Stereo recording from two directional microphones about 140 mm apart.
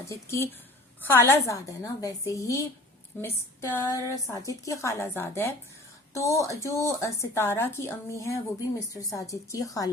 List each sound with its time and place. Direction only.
0.0 s a woman's voice: 20° left (ahead or behind)